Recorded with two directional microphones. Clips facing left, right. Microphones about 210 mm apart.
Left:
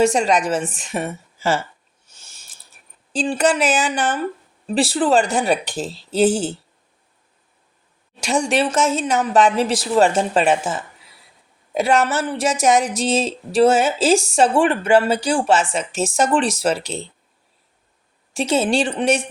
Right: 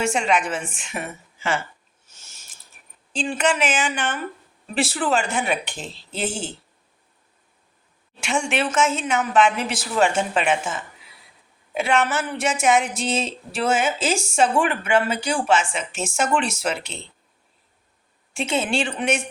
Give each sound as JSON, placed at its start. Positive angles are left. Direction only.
{"t": 0.0, "sound": "speech", "side_deg": 40}
{"t": 2.1, "sound": "a sound", "side_deg": 30}
{"t": 3.1, "sound": "speech", "side_deg": 35}
{"t": 8.2, "sound": "speech", "side_deg": 35}
{"t": 18.3, "sound": "speech", "side_deg": 35}